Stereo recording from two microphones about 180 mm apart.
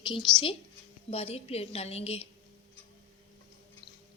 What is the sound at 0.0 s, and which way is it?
A woman's voice, 25° left (ahead or behind).